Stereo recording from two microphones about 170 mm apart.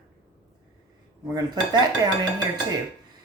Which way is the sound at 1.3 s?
25° right (ahead or behind).